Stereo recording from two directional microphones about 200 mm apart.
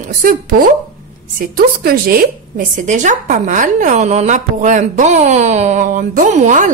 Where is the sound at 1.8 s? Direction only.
45° right (ahead or behind).